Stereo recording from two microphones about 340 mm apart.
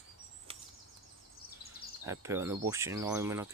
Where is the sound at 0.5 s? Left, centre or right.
Centre.